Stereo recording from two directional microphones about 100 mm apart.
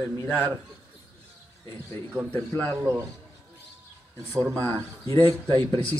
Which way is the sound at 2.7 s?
30° right (ahead or behind).